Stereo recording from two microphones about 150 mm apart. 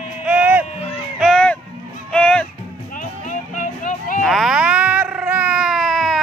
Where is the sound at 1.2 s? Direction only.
5° left (ahead or behind).